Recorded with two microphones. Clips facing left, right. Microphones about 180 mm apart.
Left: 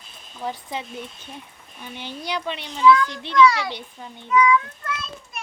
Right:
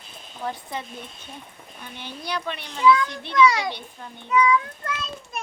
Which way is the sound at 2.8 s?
15° right (ahead or behind).